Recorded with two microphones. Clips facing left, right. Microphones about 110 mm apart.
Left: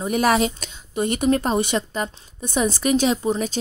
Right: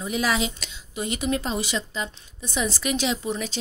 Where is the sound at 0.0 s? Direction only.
50° left (ahead or behind).